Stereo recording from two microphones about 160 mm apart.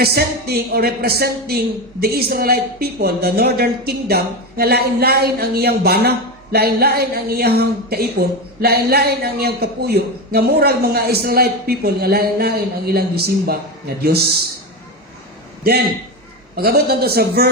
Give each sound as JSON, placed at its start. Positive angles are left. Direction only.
{"t": 0.0, "sound": "a woman's voice", "side_deg": -80}
{"t": 16.6, "sound": "a woman's voice", "side_deg": -80}